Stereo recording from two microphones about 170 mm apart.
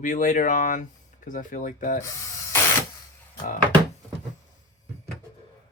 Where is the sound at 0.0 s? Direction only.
50° left (ahead or behind).